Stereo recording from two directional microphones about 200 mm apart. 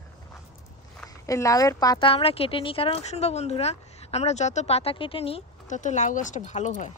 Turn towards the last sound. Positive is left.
turn(degrees=35)  # may be behind; listen again after turning